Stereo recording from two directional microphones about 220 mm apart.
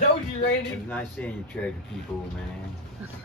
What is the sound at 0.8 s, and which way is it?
Speech, 5° left (ahead or behind).